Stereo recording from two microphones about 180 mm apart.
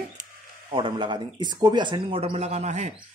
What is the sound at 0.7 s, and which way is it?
Speech, 25° right (ahead or behind).